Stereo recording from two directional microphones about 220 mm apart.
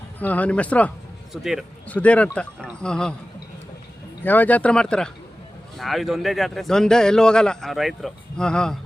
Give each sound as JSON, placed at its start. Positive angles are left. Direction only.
{"t": 0.2, "sound": "a man's voice", "side_deg": 5}
{"t": 4.2, "sound": "a man's voice", "side_deg": 10}